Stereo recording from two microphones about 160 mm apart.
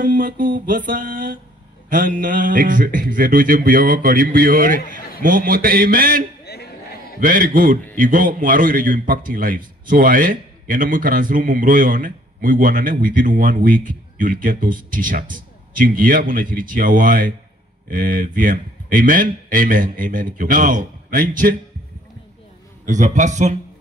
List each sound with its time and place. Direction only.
0.0 s a man's voice: 60° right (ahead or behind)
6.4 s a sound: 90° left
7.2 s a man's voice: 60° right (ahead or behind)
22.8 s a man's voice: 50° right (ahead or behind)